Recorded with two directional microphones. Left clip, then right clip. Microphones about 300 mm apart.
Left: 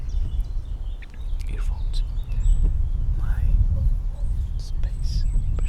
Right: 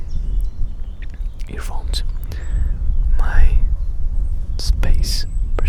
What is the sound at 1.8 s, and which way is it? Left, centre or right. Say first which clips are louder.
Whispering: right 12 dB; right.